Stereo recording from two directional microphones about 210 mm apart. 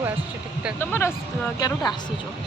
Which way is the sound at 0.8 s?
10° left (ahead or behind).